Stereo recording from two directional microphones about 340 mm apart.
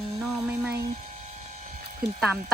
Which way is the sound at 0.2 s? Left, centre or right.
Centre.